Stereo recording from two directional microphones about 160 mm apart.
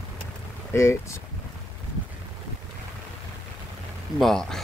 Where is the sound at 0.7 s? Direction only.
15° left (ahead or behind).